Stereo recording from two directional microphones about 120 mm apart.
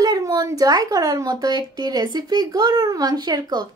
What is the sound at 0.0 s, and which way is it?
Speech, 35° right (ahead or behind).